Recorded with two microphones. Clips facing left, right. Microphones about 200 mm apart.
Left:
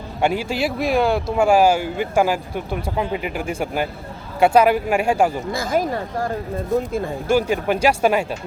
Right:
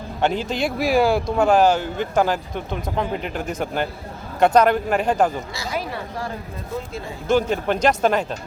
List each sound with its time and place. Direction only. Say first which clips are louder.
0.2 s speech: left 1 dB; 10° left (ahead or behind)
1.4 s speech: left 2 dB; 10° left (ahead or behind)
5.5 s speech: left 7 dB; 50° left (ahead or behind)
7.3 s speech: even; 10° left (ahead or behind)